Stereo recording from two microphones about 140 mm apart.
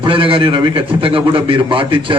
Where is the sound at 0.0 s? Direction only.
40° right (ahead or behind).